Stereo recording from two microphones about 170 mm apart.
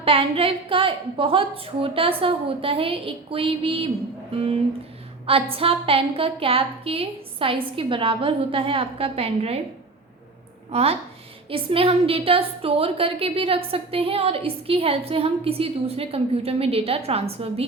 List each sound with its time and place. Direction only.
0.0 s a woman's voice: 35° right (ahead or behind)
5.2 s a woman's voice: 35° right (ahead or behind)
10.7 s a woman's voice: 35° right (ahead or behind)